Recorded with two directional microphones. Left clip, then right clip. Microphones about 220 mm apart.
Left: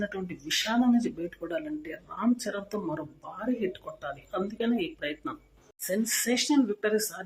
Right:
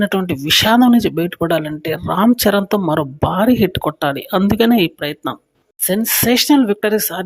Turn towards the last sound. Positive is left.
turn(degrees=-45)  # may be behind; listen again after turning